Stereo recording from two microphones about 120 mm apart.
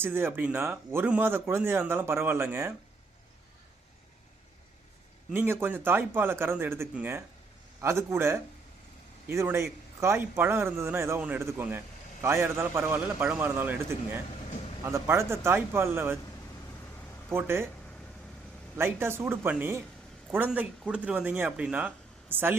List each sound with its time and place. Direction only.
0.0 s speech: 15° right (ahead or behind)
5.3 s speech: 15° right (ahead or behind)
17.2 s speech: 20° right (ahead or behind)
18.8 s speech: 20° right (ahead or behind)